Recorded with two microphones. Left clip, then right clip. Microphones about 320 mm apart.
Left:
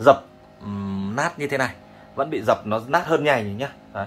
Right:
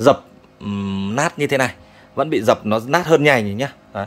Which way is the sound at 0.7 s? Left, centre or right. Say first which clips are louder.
Right 5 dB; right.